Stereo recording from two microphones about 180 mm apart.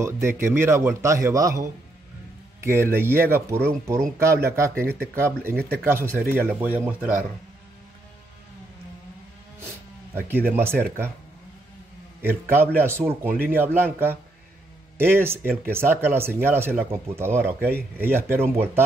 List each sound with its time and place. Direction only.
0.0 s speech: 15° right (ahead or behind)
2.6 s speech: 15° right (ahead or behind)
10.1 s speech: 10° right (ahead or behind)
12.2 s speech: 10° right (ahead or behind)